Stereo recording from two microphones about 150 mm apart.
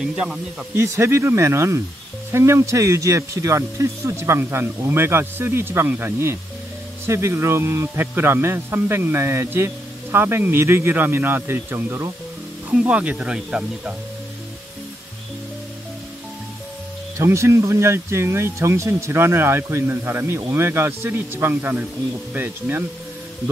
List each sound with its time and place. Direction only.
0.0 s speech: 5° right (ahead or behind)
0.8 s speech: 20° right (ahead or behind)
17.2 s speech: 20° right (ahead or behind)